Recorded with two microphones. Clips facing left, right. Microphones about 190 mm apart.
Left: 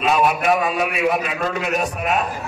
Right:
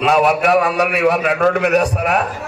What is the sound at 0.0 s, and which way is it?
A man's voice, 70° right (ahead or behind).